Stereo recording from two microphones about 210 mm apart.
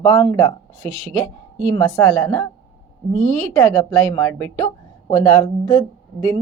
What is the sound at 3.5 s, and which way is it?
Speech, 10° left (ahead or behind).